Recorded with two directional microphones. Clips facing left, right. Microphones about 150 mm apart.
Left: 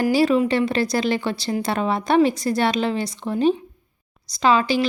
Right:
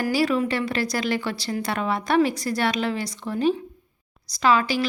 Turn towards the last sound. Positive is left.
turn(degrees=25)  # may be behind; listen again after turning